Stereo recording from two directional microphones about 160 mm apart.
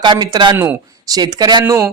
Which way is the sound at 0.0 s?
25° right (ahead or behind).